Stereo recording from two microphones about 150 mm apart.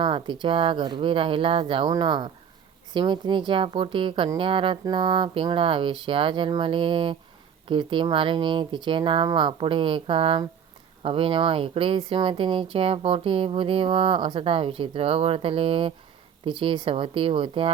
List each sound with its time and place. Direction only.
0.0 s speech: 35° right (ahead or behind)